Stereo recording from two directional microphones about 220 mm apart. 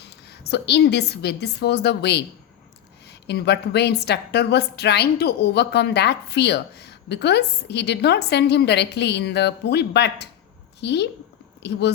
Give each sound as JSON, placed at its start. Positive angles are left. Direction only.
{"t": 0.0, "sound": "a woman's voice", "side_deg": 50}